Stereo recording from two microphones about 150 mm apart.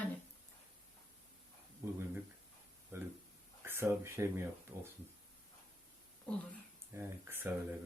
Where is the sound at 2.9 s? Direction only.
15° right (ahead or behind).